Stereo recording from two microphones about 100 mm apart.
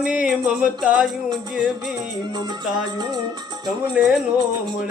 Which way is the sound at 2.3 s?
45° right (ahead or behind).